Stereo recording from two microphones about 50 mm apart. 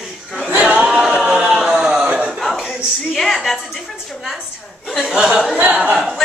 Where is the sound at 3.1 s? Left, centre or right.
Centre.